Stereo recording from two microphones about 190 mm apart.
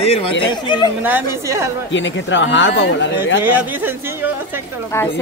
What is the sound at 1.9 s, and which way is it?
Speech, 75° left (ahead or behind).